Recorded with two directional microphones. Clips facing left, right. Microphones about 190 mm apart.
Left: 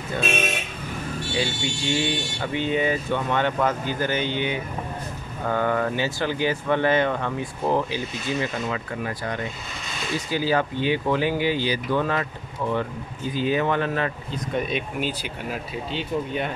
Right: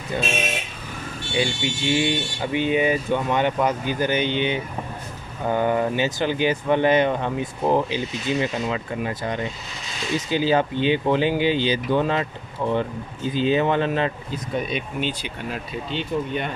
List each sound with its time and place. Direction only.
0.1 s speech: 15° right (ahead or behind)
1.4 s speech: 15° right (ahead or behind)
14.5 s speech: centre (ahead or behind)